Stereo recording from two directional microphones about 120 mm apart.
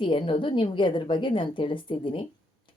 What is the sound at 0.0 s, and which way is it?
A woman's voice, 45° left (ahead or behind).